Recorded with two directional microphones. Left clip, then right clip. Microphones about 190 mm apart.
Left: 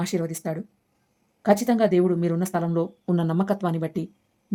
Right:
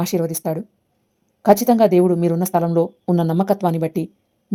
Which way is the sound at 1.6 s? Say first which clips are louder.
Right 7 dB; centre (ahead or behind).